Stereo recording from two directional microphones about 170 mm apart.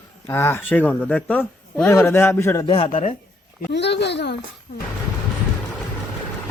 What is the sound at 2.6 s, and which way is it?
Speech, 30° left (ahead or behind).